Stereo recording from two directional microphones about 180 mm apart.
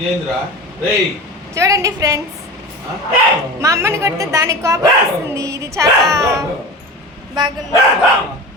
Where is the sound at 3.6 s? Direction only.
15° right (ahead or behind).